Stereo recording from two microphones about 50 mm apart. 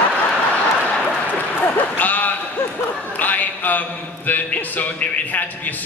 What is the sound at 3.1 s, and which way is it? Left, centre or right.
A man's voice, left.